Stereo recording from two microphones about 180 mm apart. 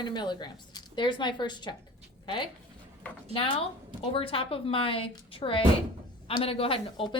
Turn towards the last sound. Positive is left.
turn(degrees=30)  # may be behind; listen again after turning